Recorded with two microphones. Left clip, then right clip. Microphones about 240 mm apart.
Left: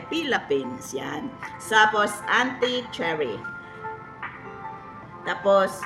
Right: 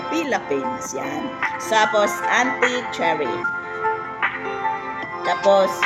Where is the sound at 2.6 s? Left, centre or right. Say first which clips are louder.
Right 5 dB; right.